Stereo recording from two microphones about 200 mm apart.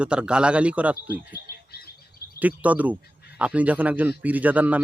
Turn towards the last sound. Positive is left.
turn(degrees=-10)  # may be behind; listen again after turning